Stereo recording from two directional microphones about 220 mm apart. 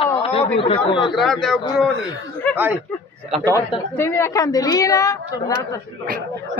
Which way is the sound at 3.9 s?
10° left (ahead or behind).